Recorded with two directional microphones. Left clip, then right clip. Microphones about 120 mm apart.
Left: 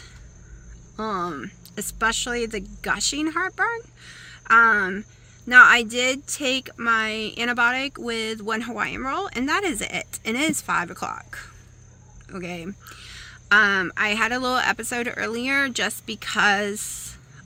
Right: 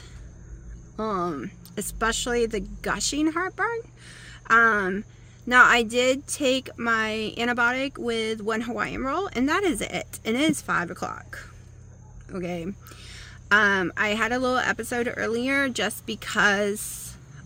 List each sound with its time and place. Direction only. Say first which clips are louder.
0.9 s a woman's voice: even; 30° right (ahead or behind)